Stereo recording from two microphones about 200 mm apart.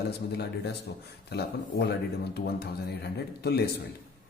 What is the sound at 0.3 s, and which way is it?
Speech, 55° left (ahead or behind).